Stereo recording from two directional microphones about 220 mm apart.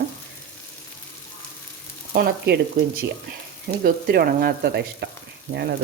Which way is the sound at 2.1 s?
45° right (ahead or behind).